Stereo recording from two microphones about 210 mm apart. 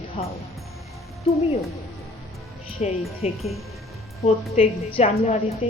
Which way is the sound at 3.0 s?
Centre (ahead or behind).